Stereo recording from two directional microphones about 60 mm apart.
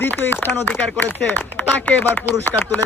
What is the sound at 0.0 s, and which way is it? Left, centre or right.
A man's voice, left.